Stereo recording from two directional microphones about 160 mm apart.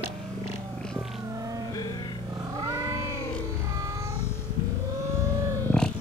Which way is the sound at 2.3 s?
25° right (ahead or behind).